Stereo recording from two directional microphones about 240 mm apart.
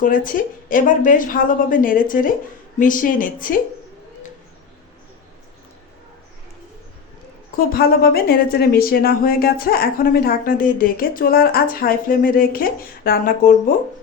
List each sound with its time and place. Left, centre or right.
0.0 s a woman's voice: left
7.5 s a woman's voice: left